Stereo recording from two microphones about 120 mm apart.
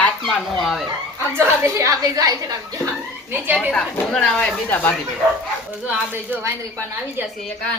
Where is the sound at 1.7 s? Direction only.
25° right (ahead or behind).